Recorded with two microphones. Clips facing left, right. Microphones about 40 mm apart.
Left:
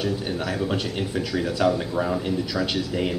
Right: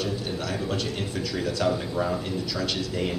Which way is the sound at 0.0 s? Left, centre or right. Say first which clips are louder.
Left 3 dB; centre.